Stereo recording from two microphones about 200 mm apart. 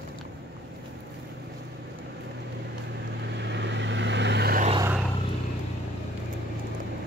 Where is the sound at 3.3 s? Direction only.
60° right (ahead or behind).